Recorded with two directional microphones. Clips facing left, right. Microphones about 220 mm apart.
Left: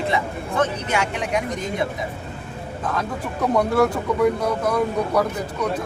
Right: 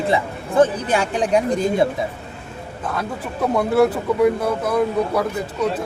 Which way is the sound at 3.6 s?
5° right (ahead or behind).